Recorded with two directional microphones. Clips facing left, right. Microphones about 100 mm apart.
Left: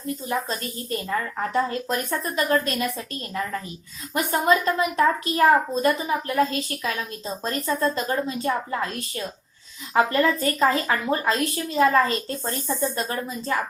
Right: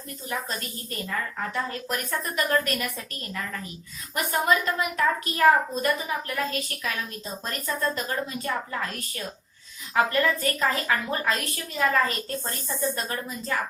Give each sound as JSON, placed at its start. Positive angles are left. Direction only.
{"t": 0.3, "sound": "a woman's voice", "side_deg": 30}